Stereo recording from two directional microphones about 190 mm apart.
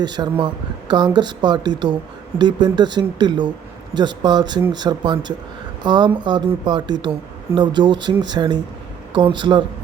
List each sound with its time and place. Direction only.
0.0 s speech: 20° right (ahead or behind)